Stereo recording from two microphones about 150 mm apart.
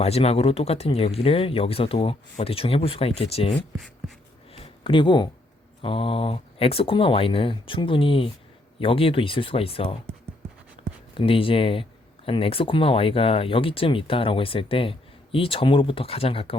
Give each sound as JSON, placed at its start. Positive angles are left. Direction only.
{"t": 0.0, "sound": "speech", "side_deg": 40}
{"t": 3.5, "sound": "speech", "side_deg": 5}
{"t": 4.5, "sound": "a sound", "side_deg": 40}
{"t": 5.8, "sound": "speech", "side_deg": 35}
{"t": 11.1, "sound": "speech", "side_deg": 35}